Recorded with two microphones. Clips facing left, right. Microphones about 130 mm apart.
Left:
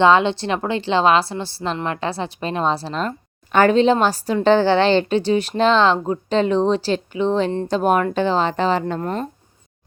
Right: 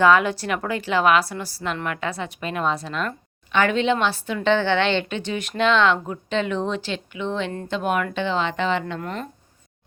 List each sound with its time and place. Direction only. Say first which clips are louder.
0.0 s a woman's voice: left 3 dB; 25° left (ahead or behind)